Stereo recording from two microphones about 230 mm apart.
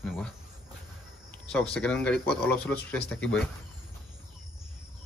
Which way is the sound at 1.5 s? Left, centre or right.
Centre.